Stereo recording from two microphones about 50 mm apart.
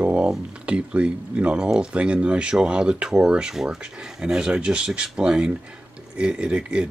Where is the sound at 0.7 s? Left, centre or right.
Right.